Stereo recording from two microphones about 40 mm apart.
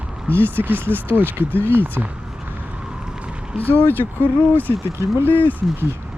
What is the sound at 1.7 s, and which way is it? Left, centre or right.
Speech, right.